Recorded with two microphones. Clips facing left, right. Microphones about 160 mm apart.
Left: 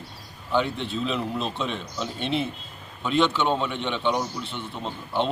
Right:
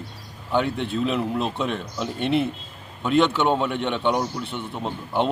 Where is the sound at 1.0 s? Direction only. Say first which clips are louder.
Right 3 dB; 10° right (ahead or behind).